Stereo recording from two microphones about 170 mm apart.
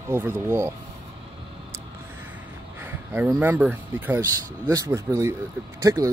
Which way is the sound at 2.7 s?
10° right (ahead or behind).